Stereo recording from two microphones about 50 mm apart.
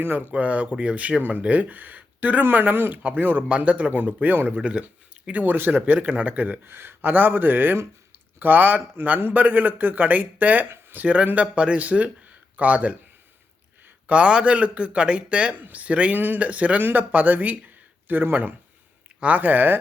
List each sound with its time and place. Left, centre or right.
0.0 s speech: right
0.3 s a man's voice: right
4.6 s speech: centre
5.3 s a man's voice: right
6.7 s a man's voice: right
14.1 s a man's voice: right
16.1 s a man's voice: right